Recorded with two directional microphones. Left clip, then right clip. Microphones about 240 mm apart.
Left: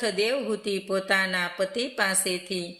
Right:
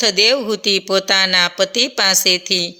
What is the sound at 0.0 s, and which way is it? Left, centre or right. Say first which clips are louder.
A man's voice: right 11 dB; right.